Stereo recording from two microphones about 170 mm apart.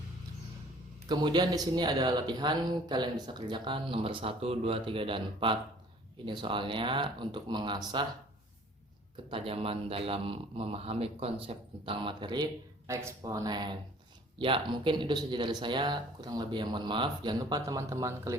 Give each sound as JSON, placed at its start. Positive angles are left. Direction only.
{"t": 1.0, "sound": "speech", "side_deg": -25}
{"t": 9.3, "sound": "a man's voice", "side_deg": -35}